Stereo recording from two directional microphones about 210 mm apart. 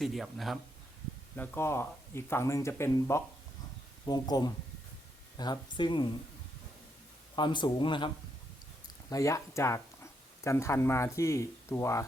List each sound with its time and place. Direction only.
0.0 s speech: centre (ahead or behind)
1.4 s speech: 10° left (ahead or behind)
7.3 s speech: 20° left (ahead or behind)